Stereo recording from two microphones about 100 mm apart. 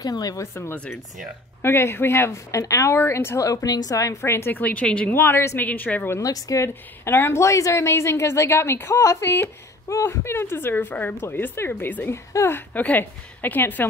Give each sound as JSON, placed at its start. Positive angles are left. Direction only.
{"t": 0.0, "sound": "a woman's voice", "side_deg": 40}
{"t": 1.6, "sound": "a woman's voice", "side_deg": 25}
{"t": 5.1, "sound": "a woman's voice", "side_deg": 25}
{"t": 6.1, "sound": "a woman's voice", "side_deg": 35}
{"t": 6.7, "sound": "a woman's voice", "side_deg": 20}